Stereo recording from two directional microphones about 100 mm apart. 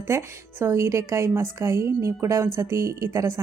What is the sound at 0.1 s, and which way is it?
A woman's voice, 25° right (ahead or behind).